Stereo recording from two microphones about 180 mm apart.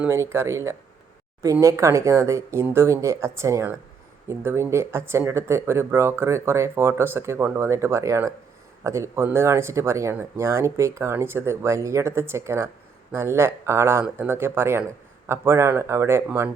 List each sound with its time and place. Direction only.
0.0 s speech: 15° right (ahead or behind)